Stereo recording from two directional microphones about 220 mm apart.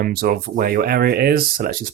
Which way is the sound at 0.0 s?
40° right (ahead or behind).